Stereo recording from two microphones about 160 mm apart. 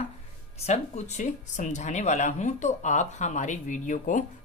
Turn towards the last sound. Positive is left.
turn(degrees=55)  # may be behind; listen again after turning